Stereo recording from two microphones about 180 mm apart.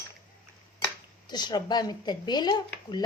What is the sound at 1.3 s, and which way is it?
Speech, 25° left (ahead or behind).